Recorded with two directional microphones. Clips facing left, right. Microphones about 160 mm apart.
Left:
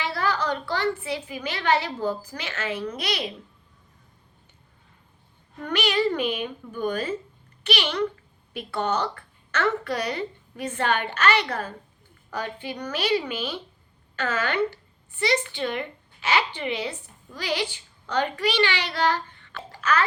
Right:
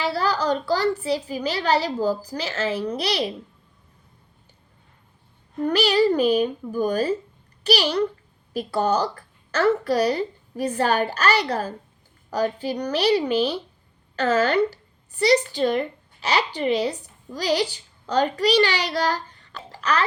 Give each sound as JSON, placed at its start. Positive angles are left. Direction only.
{"t": 0.0, "sound": "a sound", "side_deg": -35}
{"t": 0.7, "sound": "speech", "side_deg": -35}
{"t": 5.6, "sound": "a child's voice", "side_deg": -35}